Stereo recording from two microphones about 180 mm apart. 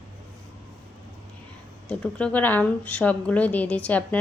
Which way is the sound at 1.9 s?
5° left (ahead or behind).